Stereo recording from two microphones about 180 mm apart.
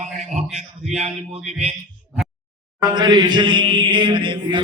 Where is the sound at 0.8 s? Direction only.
40° right (ahead or behind).